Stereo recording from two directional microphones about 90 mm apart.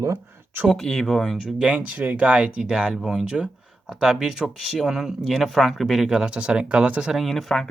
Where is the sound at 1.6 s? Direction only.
15° right (ahead or behind); by 7.6 s 5° left (ahead or behind).